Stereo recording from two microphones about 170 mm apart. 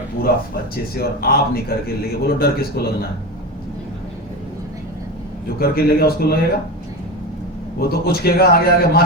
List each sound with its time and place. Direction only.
0.9 s a man's voice: 65° left (ahead or behind)
5.5 s a man's voice: 65° left (ahead or behind)
7.8 s a man's voice: 65° left (ahead or behind)